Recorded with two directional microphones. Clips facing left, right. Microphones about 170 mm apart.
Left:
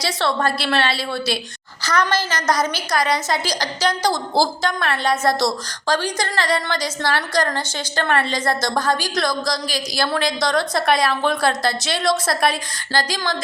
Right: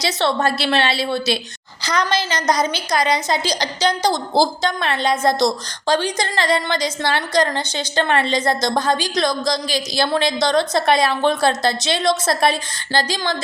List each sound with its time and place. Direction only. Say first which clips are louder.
0.0 s a woman's voice: right 2 dB; 25° right (ahead or behind)